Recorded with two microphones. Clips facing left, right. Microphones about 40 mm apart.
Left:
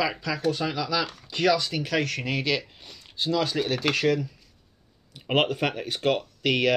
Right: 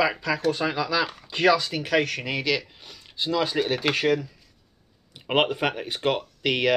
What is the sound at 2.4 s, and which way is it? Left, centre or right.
Speech, centre.